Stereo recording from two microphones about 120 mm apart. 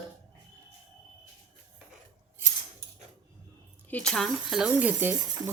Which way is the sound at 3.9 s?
10° left (ahead or behind).